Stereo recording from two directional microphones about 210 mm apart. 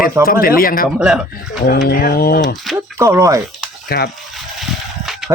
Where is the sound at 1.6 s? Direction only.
45° left (ahead or behind).